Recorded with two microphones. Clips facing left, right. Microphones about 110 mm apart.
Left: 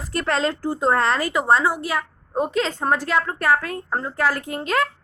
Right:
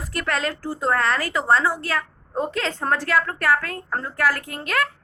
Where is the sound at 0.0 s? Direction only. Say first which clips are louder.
Left 3 dB; 30° left (ahead or behind).